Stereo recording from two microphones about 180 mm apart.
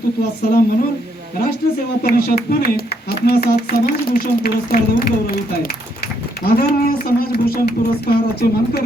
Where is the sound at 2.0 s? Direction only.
60° left (ahead or behind).